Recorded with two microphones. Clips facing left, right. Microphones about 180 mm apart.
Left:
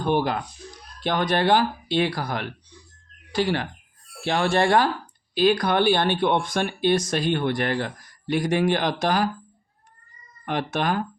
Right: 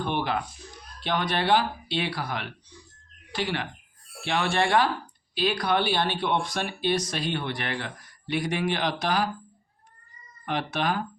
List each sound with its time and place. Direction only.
0.0 s speech: 40° left (ahead or behind)
10.4 s speech: 50° left (ahead or behind)